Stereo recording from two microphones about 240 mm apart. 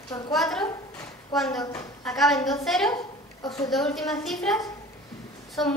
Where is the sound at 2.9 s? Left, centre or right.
Centre.